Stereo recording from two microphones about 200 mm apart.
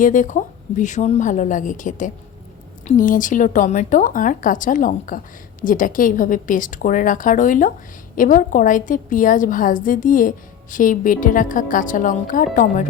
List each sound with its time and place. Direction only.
0.0 s a woman's voice: 40° left (ahead or behind)